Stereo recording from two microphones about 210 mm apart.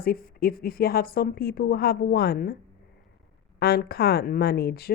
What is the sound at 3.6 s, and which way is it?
Speech, 50° left (ahead or behind).